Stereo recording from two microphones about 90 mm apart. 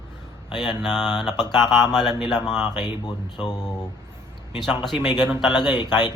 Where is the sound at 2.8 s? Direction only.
55° left (ahead or behind).